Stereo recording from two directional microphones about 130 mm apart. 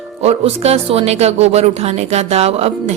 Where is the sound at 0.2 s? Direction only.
55° right (ahead or behind).